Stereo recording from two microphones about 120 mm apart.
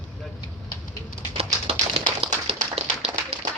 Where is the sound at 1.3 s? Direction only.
50° right (ahead or behind).